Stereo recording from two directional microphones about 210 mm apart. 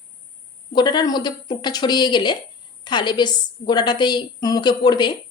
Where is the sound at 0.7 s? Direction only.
20° left (ahead or behind).